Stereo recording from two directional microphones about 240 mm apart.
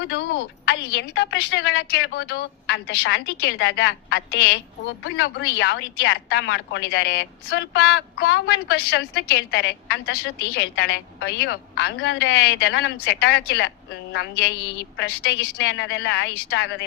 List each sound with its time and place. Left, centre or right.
0.0 s a woman's voice: left